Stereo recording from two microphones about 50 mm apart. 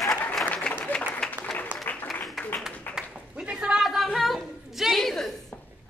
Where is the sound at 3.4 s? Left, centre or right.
Centre.